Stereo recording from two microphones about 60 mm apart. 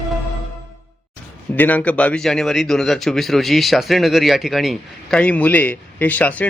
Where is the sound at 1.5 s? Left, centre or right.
Left.